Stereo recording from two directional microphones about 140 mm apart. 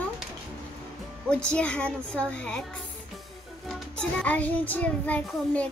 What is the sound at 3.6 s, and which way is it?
Music, 5° left (ahead or behind).